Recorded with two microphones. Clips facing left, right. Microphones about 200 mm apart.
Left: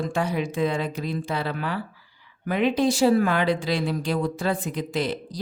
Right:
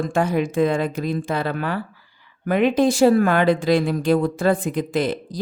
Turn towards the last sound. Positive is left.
turn(degrees=-50)  # may be behind; listen again after turning